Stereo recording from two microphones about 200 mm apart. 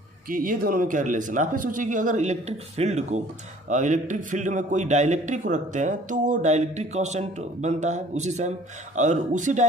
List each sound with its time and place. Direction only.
0.3 s a man's voice: 45° right (ahead or behind)